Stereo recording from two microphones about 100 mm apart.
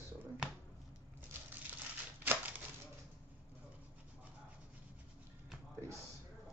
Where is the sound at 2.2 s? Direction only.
15° right (ahead or behind).